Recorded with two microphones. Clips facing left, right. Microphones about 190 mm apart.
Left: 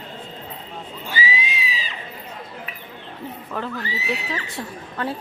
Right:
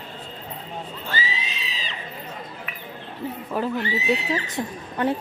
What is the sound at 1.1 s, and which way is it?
Neigh, 10° left (ahead or behind).